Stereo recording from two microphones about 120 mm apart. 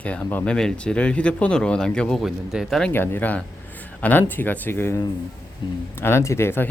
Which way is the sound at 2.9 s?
15° left (ahead or behind).